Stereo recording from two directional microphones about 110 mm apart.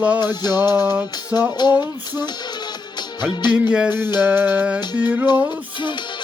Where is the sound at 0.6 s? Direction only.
20° right (ahead or behind).